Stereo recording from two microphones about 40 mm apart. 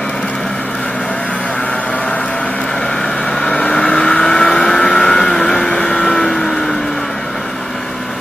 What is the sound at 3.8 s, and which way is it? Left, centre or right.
Vehicle, centre.